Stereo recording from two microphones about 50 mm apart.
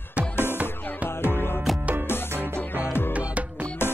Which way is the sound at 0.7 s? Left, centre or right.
Left.